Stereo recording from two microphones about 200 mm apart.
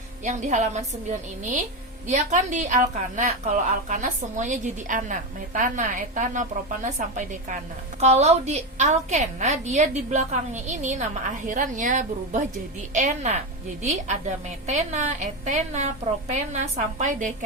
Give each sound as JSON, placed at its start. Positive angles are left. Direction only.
{"t": 0.3, "sound": "a woman's voice", "side_deg": -35}